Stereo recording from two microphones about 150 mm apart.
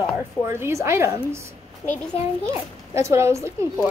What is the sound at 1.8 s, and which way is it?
Speech, 25° left (ahead or behind).